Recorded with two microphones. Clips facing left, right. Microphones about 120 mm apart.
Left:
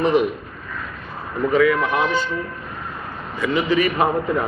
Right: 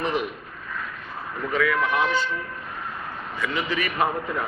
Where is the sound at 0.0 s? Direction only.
10° left (ahead or behind).